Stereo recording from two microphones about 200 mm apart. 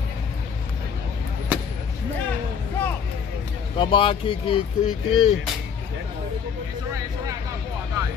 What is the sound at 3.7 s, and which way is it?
Speech, 25° left (ahead or behind).